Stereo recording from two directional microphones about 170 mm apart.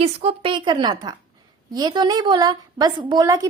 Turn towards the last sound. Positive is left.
turn(degrees=-20)  # may be behind; listen again after turning